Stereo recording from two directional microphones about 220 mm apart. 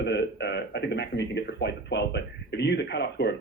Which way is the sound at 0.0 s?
50° left (ahead or behind).